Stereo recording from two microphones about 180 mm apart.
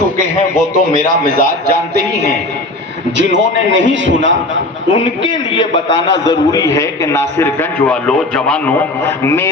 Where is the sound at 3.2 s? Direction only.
90° right.